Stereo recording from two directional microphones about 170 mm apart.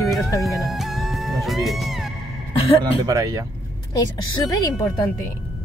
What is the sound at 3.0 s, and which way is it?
Speech, 20° right (ahead or behind).